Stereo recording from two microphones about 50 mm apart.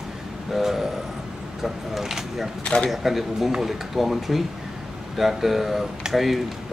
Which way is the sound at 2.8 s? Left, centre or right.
Centre.